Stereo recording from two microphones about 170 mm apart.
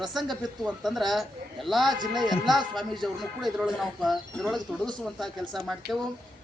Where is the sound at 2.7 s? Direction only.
Centre (ahead or behind).